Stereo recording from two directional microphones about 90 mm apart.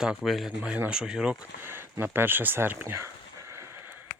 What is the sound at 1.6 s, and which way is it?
Speech, 25° right (ahead or behind).